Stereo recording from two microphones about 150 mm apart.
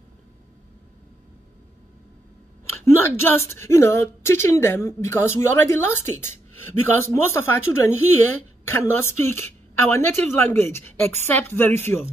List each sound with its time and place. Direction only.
2.8 s a woman's voice: 15° left (ahead or behind)